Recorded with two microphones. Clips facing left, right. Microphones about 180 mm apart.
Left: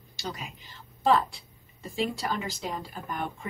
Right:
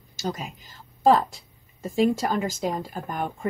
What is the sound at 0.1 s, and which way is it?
A woman's voice, 45° right (ahead or behind).